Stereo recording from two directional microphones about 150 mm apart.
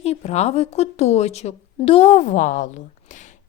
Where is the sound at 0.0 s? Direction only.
45° left (ahead or behind).